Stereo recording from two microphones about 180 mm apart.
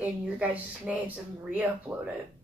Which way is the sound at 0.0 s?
5° right (ahead or behind).